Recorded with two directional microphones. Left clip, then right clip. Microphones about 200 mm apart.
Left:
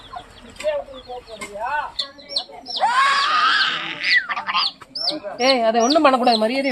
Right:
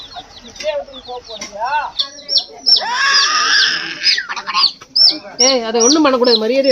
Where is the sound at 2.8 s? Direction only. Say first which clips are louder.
Right 3 dB; 15° left (ahead or behind).